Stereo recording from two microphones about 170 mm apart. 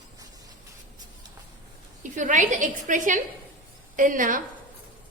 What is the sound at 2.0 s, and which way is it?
A woman's voice, 50° right (ahead or behind).